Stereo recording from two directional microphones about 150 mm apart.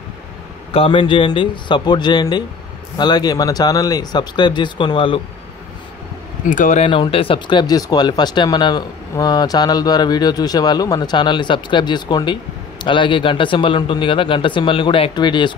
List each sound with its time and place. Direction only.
0.7 s a man's voice: 35° left (ahead or behind)
6.5 s speech: 55° left (ahead or behind)
6.9 s a man's voice: 35° left (ahead or behind)